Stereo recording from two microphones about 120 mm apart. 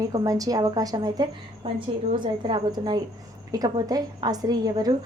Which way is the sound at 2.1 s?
40° right (ahead or behind).